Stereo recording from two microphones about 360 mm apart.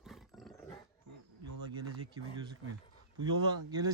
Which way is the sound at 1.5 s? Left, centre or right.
Right.